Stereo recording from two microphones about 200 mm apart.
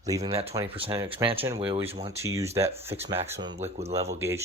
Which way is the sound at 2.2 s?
15° right (ahead or behind).